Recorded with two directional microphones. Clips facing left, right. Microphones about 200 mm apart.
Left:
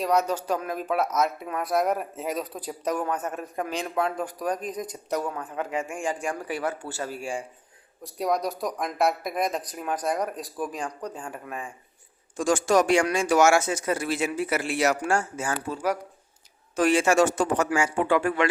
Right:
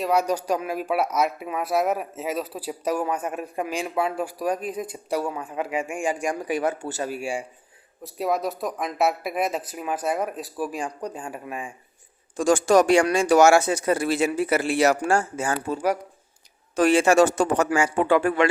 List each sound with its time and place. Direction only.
0.0 s speech: 10° right (ahead or behind)
12.4 s a man's voice: 40° right (ahead or behind)
15.7 s speech: 10° right (ahead or behind)
16.7 s a man's voice: 35° right (ahead or behind)